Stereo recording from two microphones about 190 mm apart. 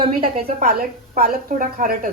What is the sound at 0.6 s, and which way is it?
A woman's voice, 50° right (ahead or behind).